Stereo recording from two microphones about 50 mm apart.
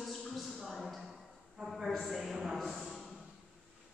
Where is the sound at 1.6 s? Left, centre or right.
Centre.